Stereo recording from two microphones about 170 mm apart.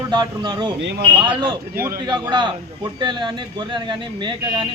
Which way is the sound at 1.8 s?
20° right (ahead or behind).